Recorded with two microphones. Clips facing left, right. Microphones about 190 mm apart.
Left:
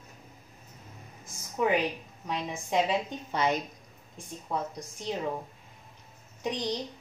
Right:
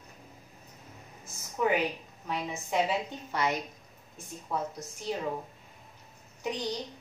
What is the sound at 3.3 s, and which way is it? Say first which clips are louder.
Speech: left 2 dB; 20° left (ahead or behind).